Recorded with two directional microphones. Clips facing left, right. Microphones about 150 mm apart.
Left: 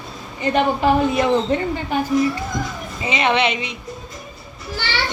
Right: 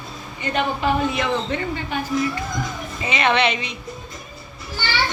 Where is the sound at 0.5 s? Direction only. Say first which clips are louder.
Left 4 dB; 40° left (ahead or behind).